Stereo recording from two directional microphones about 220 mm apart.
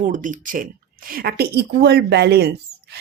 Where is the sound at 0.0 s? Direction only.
35° right (ahead or behind).